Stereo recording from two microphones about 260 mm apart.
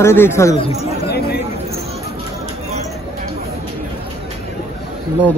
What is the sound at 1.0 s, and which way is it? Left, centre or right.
Chatter, left.